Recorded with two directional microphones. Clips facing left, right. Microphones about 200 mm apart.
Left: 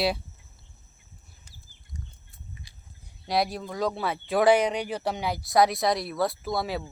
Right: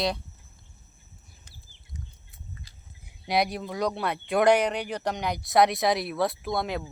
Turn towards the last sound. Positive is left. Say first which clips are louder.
# even
turn(degrees=5)  # may be behind; listen again after turning